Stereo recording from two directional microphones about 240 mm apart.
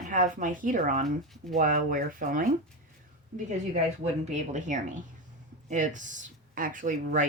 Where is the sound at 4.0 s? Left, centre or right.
Right.